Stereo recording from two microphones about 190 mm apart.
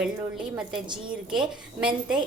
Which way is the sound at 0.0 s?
5° right (ahead or behind).